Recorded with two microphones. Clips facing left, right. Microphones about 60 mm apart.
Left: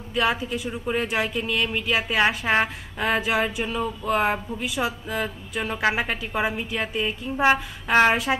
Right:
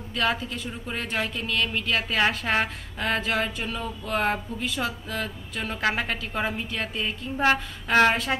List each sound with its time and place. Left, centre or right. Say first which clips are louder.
0.1 s speech: left 3 dB; centre